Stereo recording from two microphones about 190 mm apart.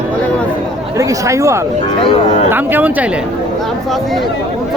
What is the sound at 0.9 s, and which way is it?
Speech, 15° right (ahead or behind).